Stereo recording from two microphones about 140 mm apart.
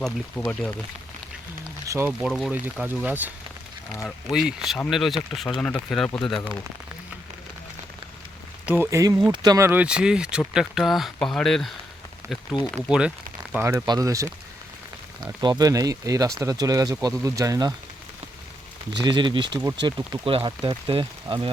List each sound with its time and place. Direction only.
0.0 s speech: 5° left (ahead or behind)
2.0 s speech: 5° right (ahead or behind)
8.6 s speech: 15° right (ahead or behind)
9.6 s speech: 10° right (ahead or behind)
12.2 s speech: 20° right (ahead or behind)
12.9 s speech: 5° right (ahead or behind); by 17.7 s 25° right (ahead or behind)
18.9 s speech: 35° right (ahead or behind)